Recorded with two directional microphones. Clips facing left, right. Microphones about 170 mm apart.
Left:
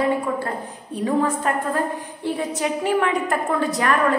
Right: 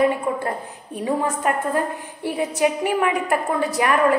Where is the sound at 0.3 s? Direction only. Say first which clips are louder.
Right 1 dB; 25° right (ahead or behind).